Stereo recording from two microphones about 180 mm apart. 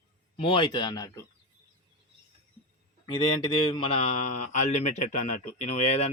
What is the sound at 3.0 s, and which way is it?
Mantra, 25° left (ahead or behind).